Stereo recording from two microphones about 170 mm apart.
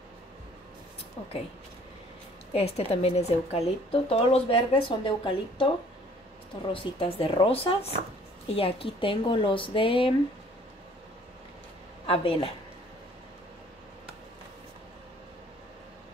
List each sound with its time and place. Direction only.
2.5 s speech: 35° left (ahead or behind)
6.7 s speech: 30° left (ahead or behind)
12.1 s speech: 30° left (ahead or behind)